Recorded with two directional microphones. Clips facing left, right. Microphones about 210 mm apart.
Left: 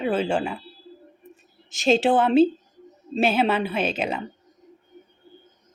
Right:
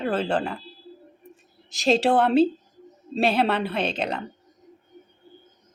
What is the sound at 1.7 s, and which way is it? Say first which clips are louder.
A woman's voice: left 1 dB; centre (ahead or behind).